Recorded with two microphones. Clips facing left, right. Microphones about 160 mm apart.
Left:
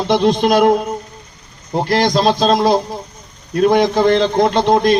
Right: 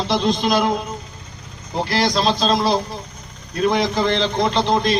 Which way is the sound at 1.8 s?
55° left (ahead or behind).